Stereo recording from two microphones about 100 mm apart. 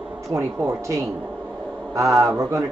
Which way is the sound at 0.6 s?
30° right (ahead or behind).